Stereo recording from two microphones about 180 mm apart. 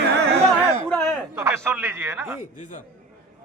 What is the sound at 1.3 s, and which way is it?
Speech, 15° right (ahead or behind).